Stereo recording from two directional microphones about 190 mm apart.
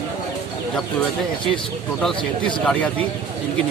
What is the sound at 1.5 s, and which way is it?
A man's voice, centre (ahead or behind).